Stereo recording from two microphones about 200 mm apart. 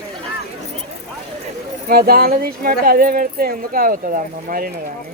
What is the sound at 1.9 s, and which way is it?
Speech, 50° right (ahead or behind).